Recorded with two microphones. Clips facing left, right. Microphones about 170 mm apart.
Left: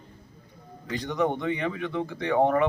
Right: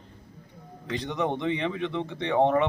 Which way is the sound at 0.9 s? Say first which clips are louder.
Left 2 dB; 25° right (ahead or behind).